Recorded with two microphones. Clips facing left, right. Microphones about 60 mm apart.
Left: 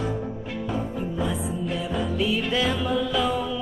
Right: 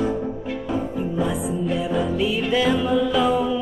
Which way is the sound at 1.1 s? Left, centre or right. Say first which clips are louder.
Right 5 dB; centre.